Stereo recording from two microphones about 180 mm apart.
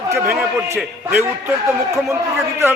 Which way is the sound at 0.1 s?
15° right (ahead or behind).